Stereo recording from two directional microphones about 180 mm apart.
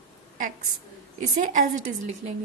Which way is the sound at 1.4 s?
40° right (ahead or behind).